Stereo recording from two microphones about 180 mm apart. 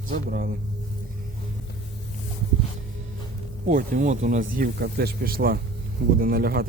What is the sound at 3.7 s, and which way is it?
Speech, 45° right (ahead or behind).